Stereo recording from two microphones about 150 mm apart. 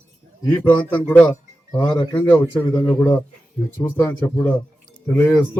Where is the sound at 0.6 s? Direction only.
10° left (ahead or behind).